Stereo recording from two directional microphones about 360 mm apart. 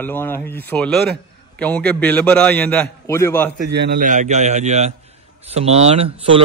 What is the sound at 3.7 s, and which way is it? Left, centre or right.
A man's voice, right.